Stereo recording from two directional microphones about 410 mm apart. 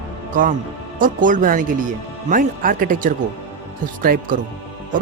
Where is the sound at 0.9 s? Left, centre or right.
Centre.